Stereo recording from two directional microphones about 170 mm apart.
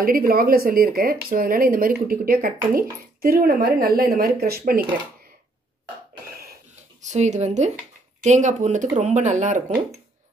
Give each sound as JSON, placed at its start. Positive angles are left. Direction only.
{"t": 0.0, "sound": "a woman's voice", "side_deg": -60}
{"t": 6.3, "sound": "a sound", "side_deg": -65}
{"t": 7.0, "sound": "speech", "side_deg": -45}